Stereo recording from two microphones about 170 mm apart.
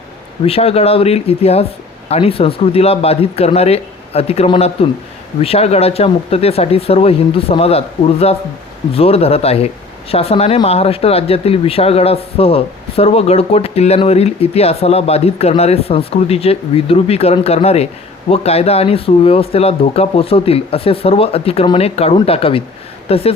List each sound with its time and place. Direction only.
0.4 s speech: 35° left (ahead or behind)